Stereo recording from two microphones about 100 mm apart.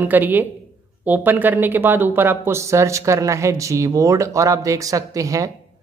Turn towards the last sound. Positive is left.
turn(degrees=-35)  # may be behind; listen again after turning